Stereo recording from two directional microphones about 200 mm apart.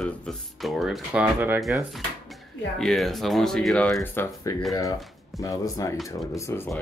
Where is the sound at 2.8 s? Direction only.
Centre (ahead or behind).